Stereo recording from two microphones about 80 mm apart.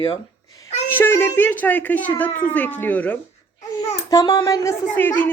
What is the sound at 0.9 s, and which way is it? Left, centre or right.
Speech, left.